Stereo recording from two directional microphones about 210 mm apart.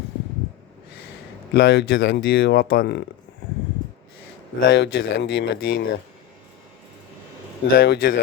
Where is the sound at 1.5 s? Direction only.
55° left (ahead or behind).